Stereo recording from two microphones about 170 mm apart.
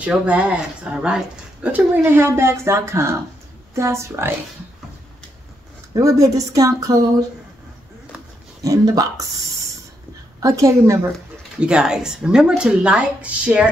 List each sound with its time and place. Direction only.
0.0 s speech: 10° right (ahead or behind)
5.9 s speech: 20° right (ahead or behind)
8.6 s speech: 20° right (ahead or behind)
10.4 s speech: 20° right (ahead or behind)
11.6 s speech: 5° right (ahead or behind)